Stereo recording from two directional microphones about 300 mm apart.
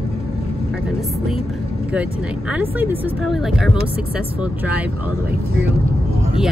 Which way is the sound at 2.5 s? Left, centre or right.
Centre.